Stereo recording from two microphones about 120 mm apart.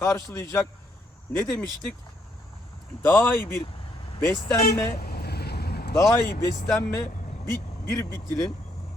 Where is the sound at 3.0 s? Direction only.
15° left (ahead or behind).